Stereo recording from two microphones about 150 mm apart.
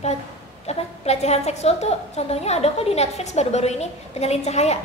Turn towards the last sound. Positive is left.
turn(degrees=45)  # may be behind; listen again after turning